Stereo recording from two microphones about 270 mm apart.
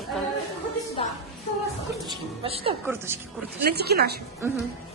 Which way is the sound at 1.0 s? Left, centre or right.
Left.